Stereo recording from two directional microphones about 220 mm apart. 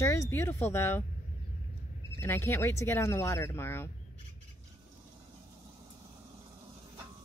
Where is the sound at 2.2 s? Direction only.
10° left (ahead or behind).